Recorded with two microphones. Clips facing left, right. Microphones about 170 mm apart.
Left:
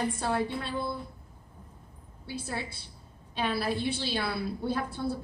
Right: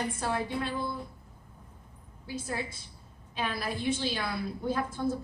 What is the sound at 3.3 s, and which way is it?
A woman's voice, 35° left (ahead or behind).